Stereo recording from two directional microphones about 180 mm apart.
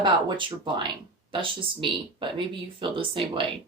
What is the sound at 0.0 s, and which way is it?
Speech, 25° right (ahead or behind).